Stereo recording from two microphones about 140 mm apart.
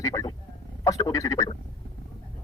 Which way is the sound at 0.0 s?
25° left (ahead or behind).